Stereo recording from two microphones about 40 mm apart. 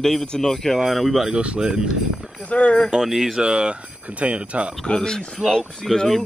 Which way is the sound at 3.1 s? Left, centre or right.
Centre.